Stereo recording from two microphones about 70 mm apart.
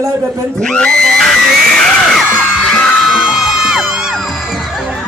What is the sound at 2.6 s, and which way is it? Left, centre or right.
Music, centre.